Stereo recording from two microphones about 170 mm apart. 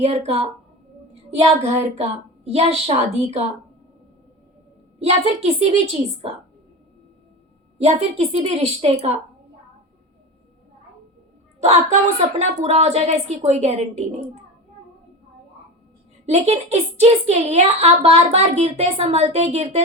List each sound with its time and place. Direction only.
0.0 s a woman's voice: 40° right (ahead or behind)
2.0 s a woman's voice: 40° right (ahead or behind)
4.9 s a woman's voice: 40° right (ahead or behind)
7.8 s a woman's voice: 40° right (ahead or behind)
11.6 s a woman's voice: 40° right (ahead or behind)
16.2 s a woman's voice: 40° right (ahead or behind)